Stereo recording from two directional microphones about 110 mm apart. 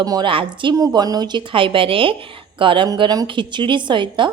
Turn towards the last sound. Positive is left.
turn(degrees=-45)  # may be behind; listen again after turning